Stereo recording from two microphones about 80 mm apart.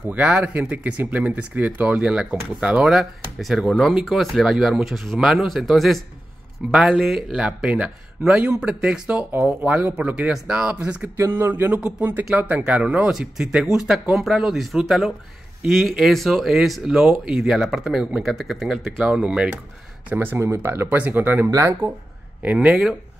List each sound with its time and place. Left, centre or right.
0.1 s speech: centre
6.7 s speech: centre
7.3 s speech: centre
11.1 s speech: right; by 18.8 s centre
18.9 s speech: centre
20.1 s speech: right
21.5 s speech: right
22.4 s speech: centre